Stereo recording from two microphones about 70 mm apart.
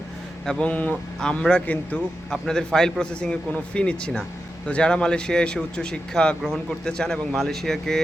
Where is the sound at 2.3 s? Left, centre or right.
Centre.